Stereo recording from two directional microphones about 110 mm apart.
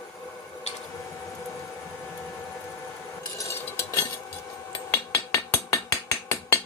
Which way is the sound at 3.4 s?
25° left (ahead or behind).